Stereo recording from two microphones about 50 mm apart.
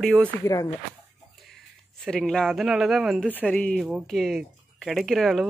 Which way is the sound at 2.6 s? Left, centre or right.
Centre.